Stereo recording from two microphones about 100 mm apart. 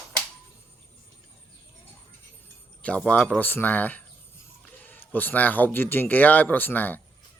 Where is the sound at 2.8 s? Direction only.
15° left (ahead or behind).